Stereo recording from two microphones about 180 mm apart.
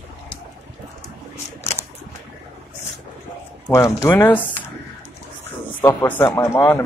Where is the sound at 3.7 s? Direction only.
15° left (ahead or behind).